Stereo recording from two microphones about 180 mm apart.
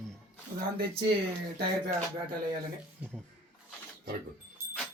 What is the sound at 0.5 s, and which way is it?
Speech, 55° right (ahead or behind).